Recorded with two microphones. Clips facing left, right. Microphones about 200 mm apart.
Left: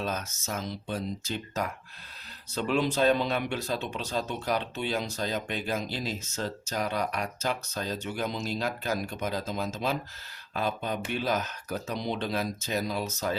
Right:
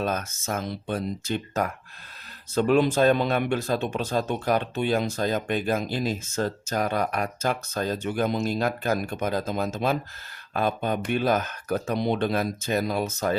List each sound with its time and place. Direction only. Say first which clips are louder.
0.0 s speech: right 5 dB; 55° right (ahead or behind)